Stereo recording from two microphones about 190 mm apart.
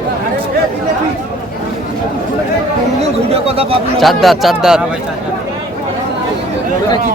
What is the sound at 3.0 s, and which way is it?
Speech, 30° right (ahead or behind).